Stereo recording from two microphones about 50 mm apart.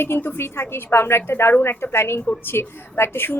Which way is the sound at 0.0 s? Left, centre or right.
Left.